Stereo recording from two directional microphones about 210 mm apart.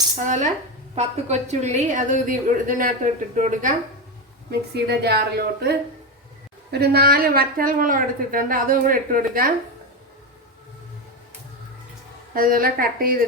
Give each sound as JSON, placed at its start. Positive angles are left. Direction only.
{"t": 0.9, "sound": "a woman's voice", "side_deg": -30}
{"t": 4.7, "sound": "a woman's voice", "side_deg": -50}
{"t": 12.3, "sound": "a woman's voice", "side_deg": -40}